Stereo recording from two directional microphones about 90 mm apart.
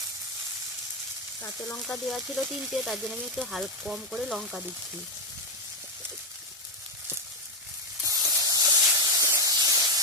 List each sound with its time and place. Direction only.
1.9 s speech: centre (ahead or behind)
2.2 s frying: 5° right (ahead or behind)
8.3 s a sound: 40° right (ahead or behind)
8.8 s hiss: 40° right (ahead or behind)